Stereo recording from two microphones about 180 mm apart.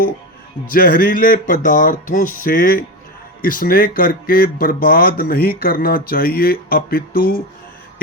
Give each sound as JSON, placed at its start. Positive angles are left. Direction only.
{"t": 0.7, "sound": "speech", "side_deg": 55}